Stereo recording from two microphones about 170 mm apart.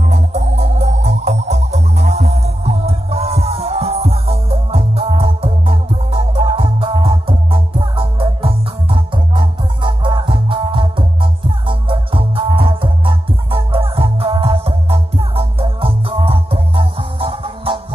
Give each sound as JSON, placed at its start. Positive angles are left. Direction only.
{"t": 0.0, "sound": "music", "side_deg": -45}